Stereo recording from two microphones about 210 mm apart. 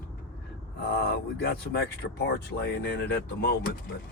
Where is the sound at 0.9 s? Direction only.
50° left (ahead or behind).